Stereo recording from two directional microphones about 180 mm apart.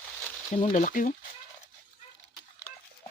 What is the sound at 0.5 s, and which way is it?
Speech, 40° left (ahead or behind).